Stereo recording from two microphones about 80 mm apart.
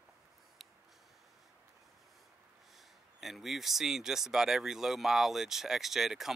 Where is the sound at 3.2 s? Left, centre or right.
Centre.